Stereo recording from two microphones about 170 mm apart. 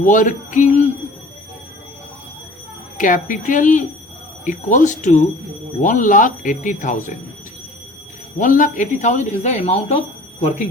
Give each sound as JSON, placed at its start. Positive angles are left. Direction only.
{"t": 0.0, "sound": "a sound", "side_deg": 50}
{"t": 3.0, "sound": "speech", "side_deg": 50}
{"t": 8.4, "sound": "speech", "side_deg": 50}